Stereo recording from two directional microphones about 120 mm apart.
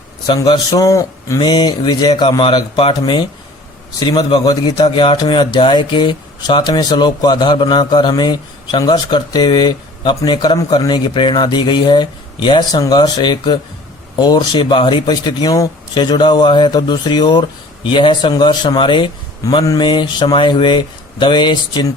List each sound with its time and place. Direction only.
0.3 s a man's voice: 35° left (ahead or behind)
1.4 s speech: 35° left (ahead or behind)